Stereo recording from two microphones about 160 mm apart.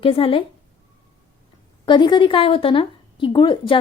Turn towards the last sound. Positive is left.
turn(degrees=30)  # may be behind; listen again after turning